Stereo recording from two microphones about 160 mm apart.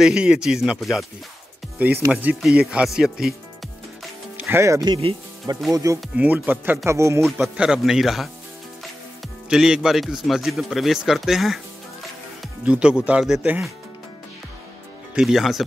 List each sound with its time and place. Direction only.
0.0 s speech: 5° right (ahead or behind)
2.2 s speech: 5° right (ahead or behind)
4.4 s speech: 15° right (ahead or behind)
5.7 s speech: 20° right (ahead or behind)
7.2 s speech: centre (ahead or behind)
9.5 s a man's voice: 5° right (ahead or behind)
15.1 s speech: centre (ahead or behind)